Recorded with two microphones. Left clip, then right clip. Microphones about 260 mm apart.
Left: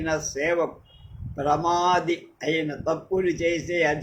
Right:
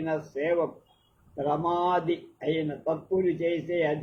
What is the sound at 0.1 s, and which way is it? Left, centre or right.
A man's voice, left.